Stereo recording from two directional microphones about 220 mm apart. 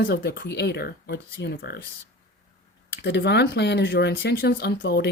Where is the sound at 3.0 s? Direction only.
50° left (ahead or behind).